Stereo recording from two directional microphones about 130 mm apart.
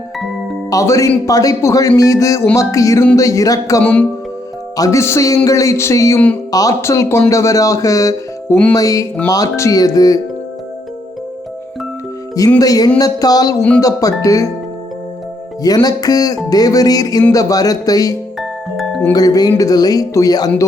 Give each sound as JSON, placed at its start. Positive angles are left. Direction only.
{"t": 0.7, "sound": "speech", "side_deg": 25}
{"t": 12.5, "sound": "speech", "side_deg": 30}
{"t": 15.6, "sound": "speech", "side_deg": 30}
{"t": 18.3, "sound": "music", "side_deg": 0}
{"t": 19.1, "sound": "speech", "side_deg": 30}